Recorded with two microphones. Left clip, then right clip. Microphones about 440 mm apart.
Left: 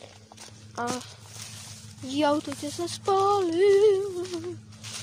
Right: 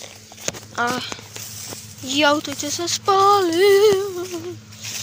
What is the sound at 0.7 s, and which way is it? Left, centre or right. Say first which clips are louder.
Speech: right 9 dB; left.